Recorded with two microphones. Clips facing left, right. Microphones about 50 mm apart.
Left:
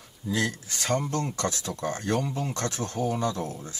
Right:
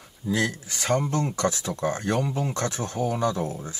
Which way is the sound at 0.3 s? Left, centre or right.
Centre.